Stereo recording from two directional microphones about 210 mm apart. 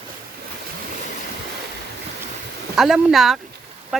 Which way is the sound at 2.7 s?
Centre (ahead or behind).